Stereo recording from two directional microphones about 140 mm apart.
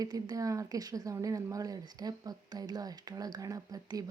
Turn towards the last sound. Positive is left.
turn(degrees=-25)  # may be behind; listen again after turning